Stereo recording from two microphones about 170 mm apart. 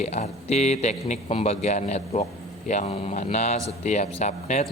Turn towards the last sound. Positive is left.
turn(degrees=45)  # may be behind; listen again after turning